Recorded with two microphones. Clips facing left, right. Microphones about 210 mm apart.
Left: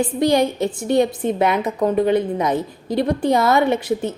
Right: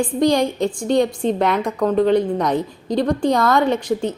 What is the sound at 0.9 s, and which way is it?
A woman's voice, 5° left (ahead or behind).